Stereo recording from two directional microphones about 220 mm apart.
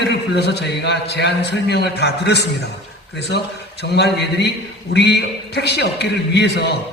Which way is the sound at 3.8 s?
50° left (ahead or behind).